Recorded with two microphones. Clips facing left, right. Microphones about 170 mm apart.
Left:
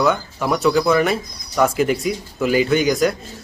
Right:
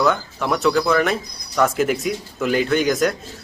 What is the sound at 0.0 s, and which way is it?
Speech, centre (ahead or behind).